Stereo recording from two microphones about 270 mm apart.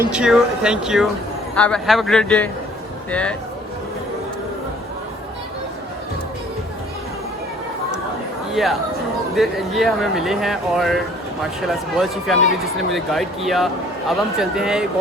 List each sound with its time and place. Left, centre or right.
0.0 s speech: centre
8.6 s speech: centre